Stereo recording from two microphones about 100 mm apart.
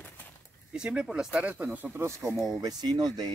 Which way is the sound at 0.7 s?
5° right (ahead or behind).